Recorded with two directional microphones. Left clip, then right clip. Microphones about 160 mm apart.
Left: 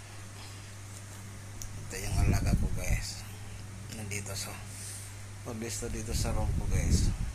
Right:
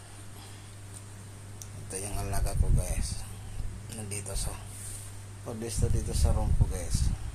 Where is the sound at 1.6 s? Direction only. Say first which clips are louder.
Right 1 dB; 35° right (ahead or behind).